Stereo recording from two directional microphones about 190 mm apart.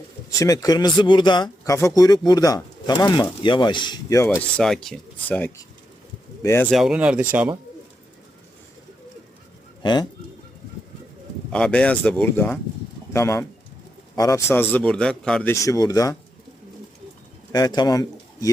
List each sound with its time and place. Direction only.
0.3 s speech: 20° left (ahead or behind)
4.4 s speech: 5° left (ahead or behind)
6.7 s speech: centre (ahead or behind)
9.8 s speech: 20° left (ahead or behind)
11.5 s a man's voice: 5° left (ahead or behind)
15.5 s a man's voice: 15° left (ahead or behind)
17.5 s speech: 20° left (ahead or behind)